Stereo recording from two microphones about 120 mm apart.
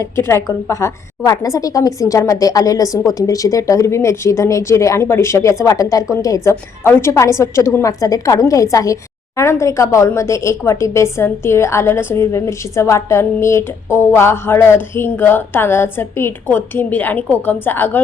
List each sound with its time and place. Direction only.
0.0 s a woman's voice: 20° left (ahead or behind)